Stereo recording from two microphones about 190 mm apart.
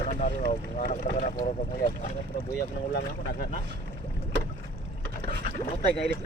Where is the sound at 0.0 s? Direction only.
40° left (ahead or behind).